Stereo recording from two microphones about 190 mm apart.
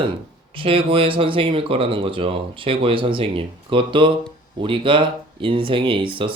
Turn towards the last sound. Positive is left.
turn(degrees=-25)  # may be behind; listen again after turning